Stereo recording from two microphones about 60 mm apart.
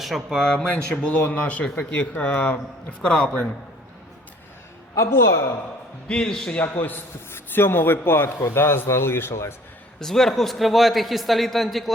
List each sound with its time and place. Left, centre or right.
0.0 s speech: centre
1.1 s speech: left
3.0 s speech: centre
4.9 s a man's voice: left
6.1 s speech: centre
6.6 s a man's voice: left
9.3 s a man's voice: left
10.0 s a man's voice: centre